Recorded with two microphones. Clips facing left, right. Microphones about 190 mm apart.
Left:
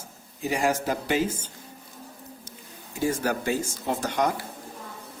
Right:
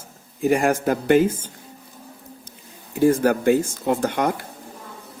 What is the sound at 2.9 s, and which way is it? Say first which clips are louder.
Speech: right 9 dB; 55° right (ahead or behind).